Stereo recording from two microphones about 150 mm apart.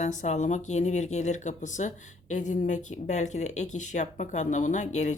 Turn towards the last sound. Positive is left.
turn(degrees=55)  # may be behind; listen again after turning